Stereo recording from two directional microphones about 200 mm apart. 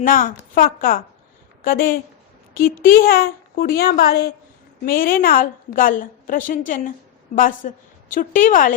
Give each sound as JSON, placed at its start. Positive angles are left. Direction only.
{"t": 0.0, "sound": "a woman's voice", "side_deg": 45}